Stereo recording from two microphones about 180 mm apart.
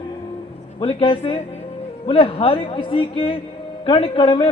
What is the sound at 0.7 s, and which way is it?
A man's voice, 30° left (ahead or behind).